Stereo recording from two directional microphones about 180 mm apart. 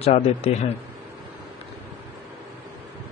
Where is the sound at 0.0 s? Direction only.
35° left (ahead or behind).